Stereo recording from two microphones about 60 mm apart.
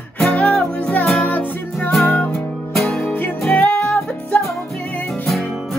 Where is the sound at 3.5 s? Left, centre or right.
Left.